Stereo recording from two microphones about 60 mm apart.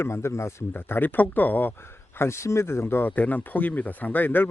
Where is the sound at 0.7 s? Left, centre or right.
Left.